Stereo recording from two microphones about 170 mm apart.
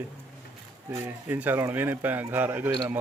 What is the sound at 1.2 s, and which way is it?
Speech, 10° right (ahead or behind).